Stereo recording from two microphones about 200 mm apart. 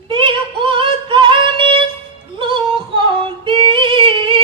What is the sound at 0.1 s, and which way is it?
Music, 25° right (ahead or behind).